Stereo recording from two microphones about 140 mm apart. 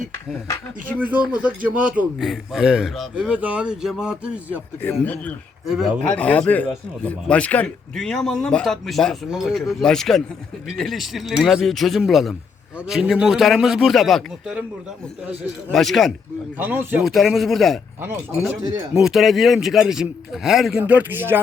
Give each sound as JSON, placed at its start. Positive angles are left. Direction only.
{"t": 1.4, "sound": "speech", "side_deg": -10}
{"t": 4.8, "sound": "speech", "side_deg": 15}
{"t": 5.6, "sound": "speech", "side_deg": 0}
{"t": 6.1, "sound": "speech", "side_deg": 10}
{"t": 15.7, "sound": "speech", "side_deg": 0}
{"t": 16.6, "sound": "speech", "side_deg": -15}
{"t": 17.0, "sound": "speech", "side_deg": 0}
{"t": 18.9, "sound": "speech", "side_deg": 0}